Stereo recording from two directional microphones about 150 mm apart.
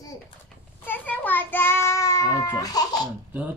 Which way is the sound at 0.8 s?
10° left (ahead or behind).